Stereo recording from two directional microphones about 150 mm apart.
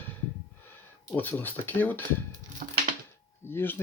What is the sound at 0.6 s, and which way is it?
Speech, 15° left (ahead or behind).